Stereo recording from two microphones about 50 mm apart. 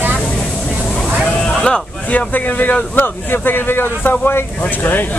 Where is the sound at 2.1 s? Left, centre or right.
Left.